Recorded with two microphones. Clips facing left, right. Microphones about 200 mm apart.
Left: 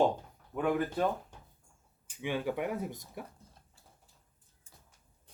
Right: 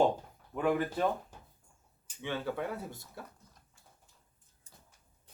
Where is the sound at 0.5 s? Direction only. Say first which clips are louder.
Even; centre (ahead or behind).